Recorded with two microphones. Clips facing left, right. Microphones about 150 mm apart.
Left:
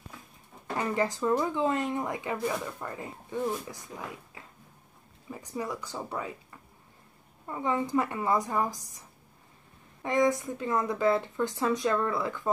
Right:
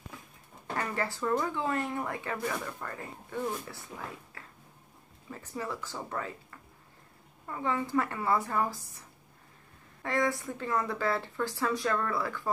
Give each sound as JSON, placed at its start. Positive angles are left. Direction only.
{"t": 0.7, "sound": "speech", "side_deg": 15}
{"t": 10.0, "sound": "a woman's voice", "side_deg": 20}